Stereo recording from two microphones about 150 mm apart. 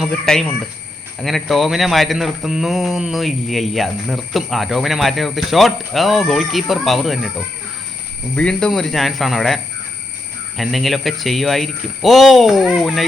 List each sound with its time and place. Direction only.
0.0 s speech: 5° left (ahead or behind)
8.4 s speech: 5° left (ahead or behind)
10.6 s speech: centre (ahead or behind)